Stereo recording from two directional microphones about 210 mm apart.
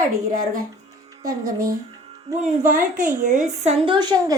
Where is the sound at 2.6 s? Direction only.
40° right (ahead or behind); by 4.1 s 20° right (ahead or behind).